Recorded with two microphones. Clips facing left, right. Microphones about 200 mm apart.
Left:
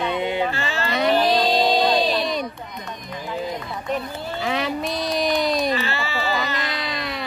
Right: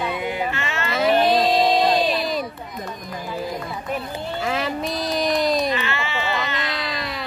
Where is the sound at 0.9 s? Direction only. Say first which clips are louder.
Right 1 dB; centre (ahead or behind).